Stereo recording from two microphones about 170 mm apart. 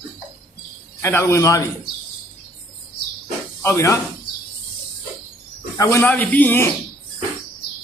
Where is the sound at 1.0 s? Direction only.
15° left (ahead or behind).